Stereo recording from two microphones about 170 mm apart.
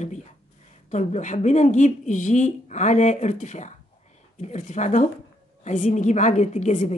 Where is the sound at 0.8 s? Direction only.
45° left (ahead or behind).